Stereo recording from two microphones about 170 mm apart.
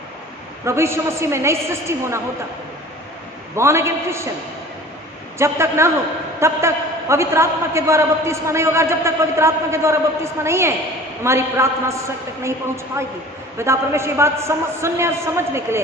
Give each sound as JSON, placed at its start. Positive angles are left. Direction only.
{"t": 0.6, "sound": "a man's voice", "side_deg": -15}
{"t": 3.5, "sound": "a man's voice", "side_deg": -15}
{"t": 5.4, "sound": "a man's voice", "side_deg": -15}